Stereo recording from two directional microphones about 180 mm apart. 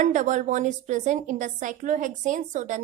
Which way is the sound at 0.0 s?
45° right (ahead or behind).